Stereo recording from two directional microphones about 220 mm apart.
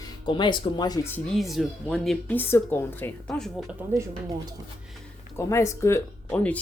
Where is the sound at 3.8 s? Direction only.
10° right (ahead or behind).